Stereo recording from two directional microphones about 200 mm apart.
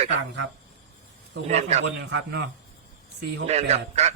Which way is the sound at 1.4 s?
35° right (ahead or behind).